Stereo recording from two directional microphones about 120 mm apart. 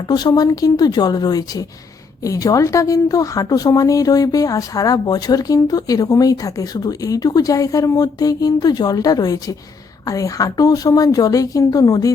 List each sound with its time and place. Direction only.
0.1 s a woman's voice: 35° left (ahead or behind)